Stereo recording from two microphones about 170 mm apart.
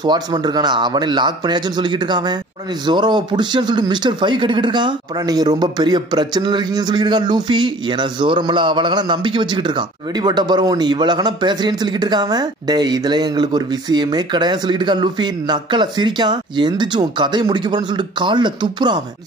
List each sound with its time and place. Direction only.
0.0 s speech: 25° right (ahead or behind)